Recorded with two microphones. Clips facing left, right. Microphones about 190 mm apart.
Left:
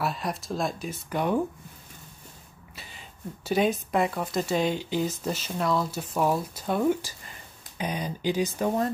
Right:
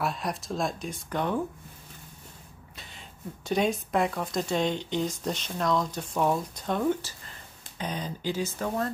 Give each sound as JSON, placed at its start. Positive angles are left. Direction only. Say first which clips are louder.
{"t": 0.0, "sound": "speech", "louder": "left 1 dB", "side_deg": 0}
{"t": 2.7, "sound": "a sound", "louder": "left 2 dB", "side_deg": 5}
{"t": 3.4, "sound": "speech", "louder": "left 2 dB", "side_deg": 5}